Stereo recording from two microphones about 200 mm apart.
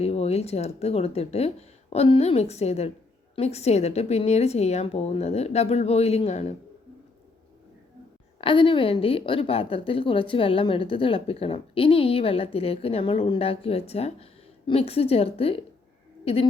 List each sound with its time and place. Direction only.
0.0 s a woman's voice: 30° left (ahead or behind)
8.4 s a woman's voice: 25° left (ahead or behind)